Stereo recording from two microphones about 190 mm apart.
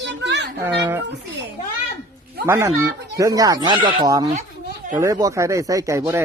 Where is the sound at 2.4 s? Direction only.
15° right (ahead or behind).